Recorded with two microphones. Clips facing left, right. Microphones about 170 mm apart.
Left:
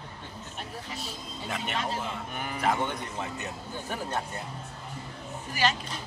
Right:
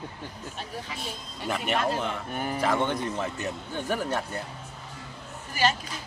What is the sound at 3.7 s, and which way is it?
Speech, 75° right (ahead or behind).